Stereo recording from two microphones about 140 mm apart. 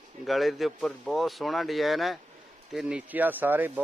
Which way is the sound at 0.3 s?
Centre (ahead or behind).